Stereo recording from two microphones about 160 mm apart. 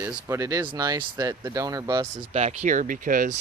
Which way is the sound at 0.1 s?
20° right (ahead or behind).